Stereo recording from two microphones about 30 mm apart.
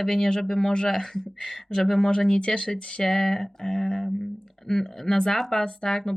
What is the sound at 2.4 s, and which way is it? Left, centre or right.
Speech, left.